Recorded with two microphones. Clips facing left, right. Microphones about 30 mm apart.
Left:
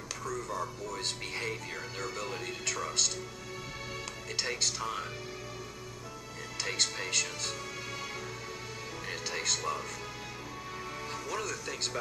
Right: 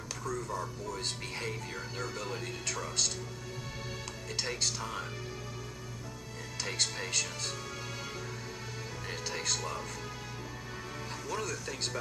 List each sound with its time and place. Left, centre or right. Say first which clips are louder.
0.2 s music: even; centre
1.0 s speech: left 3 dB; centre
4.4 s speech: left 1 dB; centre
6.6 s speech: left 2 dB; centre
9.1 s speech: left 1 dB; centre
11.2 s speech: right 1 dB; centre